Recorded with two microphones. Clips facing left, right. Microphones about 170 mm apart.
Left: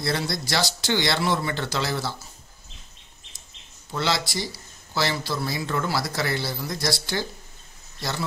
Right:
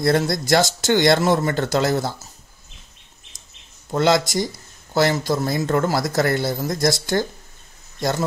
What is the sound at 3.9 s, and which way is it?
Speech, 45° right (ahead or behind).